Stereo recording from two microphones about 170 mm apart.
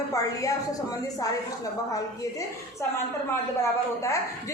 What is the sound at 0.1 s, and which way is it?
Speech, 20° left (ahead or behind).